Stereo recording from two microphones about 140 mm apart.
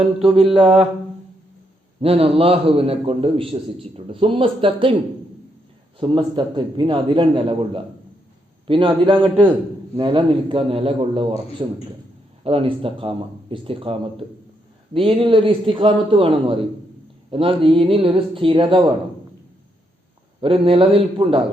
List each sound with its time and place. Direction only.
0.5 s a man's voice: 40° right (ahead or behind)
2.0 s a man's voice: 45° right (ahead or behind)
6.0 s a man's voice: 35° right (ahead or behind)
20.4 s a man's voice: 40° right (ahead or behind)